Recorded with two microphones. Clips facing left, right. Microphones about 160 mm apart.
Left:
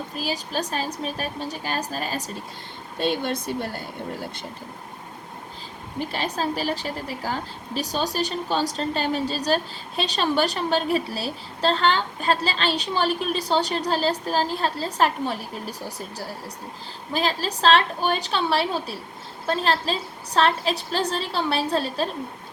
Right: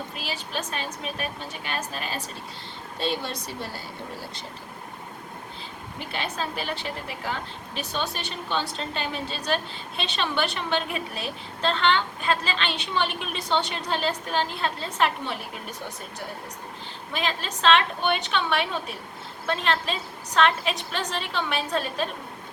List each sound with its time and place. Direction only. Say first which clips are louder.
0.2 s a woman's voice: left 7 dB; 40° left (ahead or behind)
3.0 s speech: left 5 dB; 55° left (ahead or behind)
6.1 s a woman's voice: left 3 dB; 35° left (ahead or behind)
17.1 s a woman's voice: left 5 dB; 35° left (ahead or behind)